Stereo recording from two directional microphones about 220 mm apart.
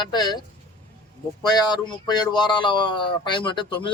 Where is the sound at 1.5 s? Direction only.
20° left (ahead or behind).